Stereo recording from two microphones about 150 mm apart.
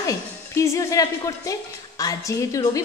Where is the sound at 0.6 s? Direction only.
20° left (ahead or behind).